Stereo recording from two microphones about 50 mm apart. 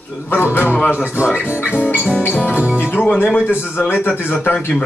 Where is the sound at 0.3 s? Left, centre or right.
Left.